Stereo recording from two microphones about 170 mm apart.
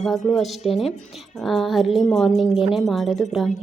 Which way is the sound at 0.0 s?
Centre (ahead or behind).